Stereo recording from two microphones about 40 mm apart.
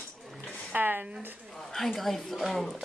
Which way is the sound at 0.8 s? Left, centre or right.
Right.